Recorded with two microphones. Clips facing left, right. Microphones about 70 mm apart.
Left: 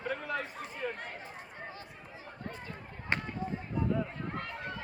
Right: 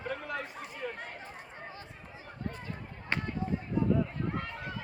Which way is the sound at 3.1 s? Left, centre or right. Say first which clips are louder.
Even; left.